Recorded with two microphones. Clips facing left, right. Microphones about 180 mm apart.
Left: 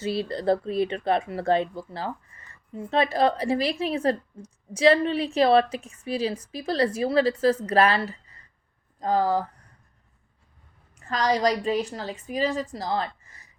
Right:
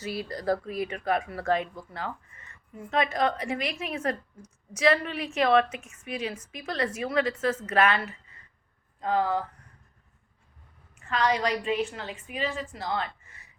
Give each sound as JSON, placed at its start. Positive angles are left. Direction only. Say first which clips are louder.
{"t": 0.0, "sound": "speech", "louder": "left 5 dB", "side_deg": 30}
{"t": 11.0, "sound": "speech", "louder": "left 3 dB", "side_deg": 40}